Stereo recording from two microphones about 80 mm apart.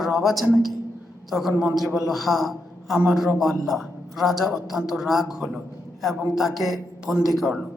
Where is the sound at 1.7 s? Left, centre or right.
Centre.